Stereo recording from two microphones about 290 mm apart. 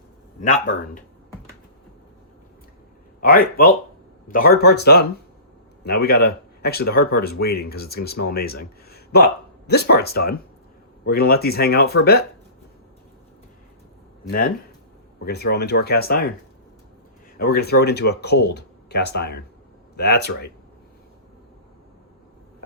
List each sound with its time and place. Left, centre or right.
3.2 s speech: left
14.3 s speech: left
17.3 s speech: left